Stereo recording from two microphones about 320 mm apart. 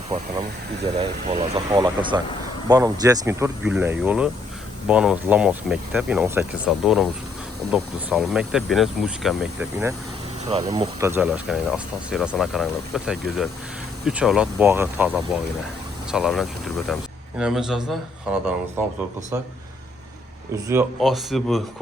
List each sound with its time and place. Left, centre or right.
0.9 s speech: centre
10.4 s speech: centre
20.7 s speech: centre